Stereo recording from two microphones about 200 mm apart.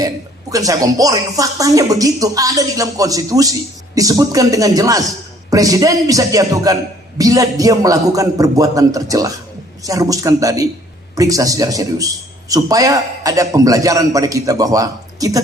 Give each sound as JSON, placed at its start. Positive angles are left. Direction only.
{"t": 0.5, "sound": "speech", "side_deg": -15}